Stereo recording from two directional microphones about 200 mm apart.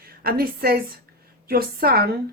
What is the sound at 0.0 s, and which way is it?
A woman's voice, 50° right (ahead or behind).